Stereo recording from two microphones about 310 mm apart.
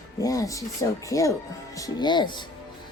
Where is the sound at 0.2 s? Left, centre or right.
Centre.